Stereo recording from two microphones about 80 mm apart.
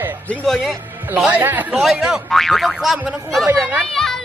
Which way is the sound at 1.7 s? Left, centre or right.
Centre.